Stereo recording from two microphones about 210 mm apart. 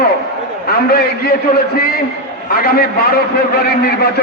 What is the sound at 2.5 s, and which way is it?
A man's voice, 45° left (ahead or behind).